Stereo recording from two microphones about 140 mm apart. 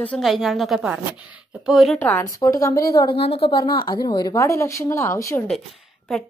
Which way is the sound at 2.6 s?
25° left (ahead or behind).